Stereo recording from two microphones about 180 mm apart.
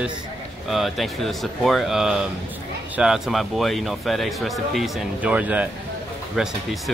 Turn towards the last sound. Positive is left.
turn(degrees=0)  # may be behind; listen again after turning